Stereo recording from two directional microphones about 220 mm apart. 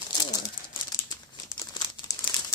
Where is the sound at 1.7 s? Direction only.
20° left (ahead or behind).